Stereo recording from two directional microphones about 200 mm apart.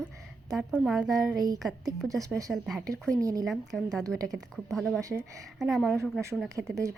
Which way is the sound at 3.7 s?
5° left (ahead or behind).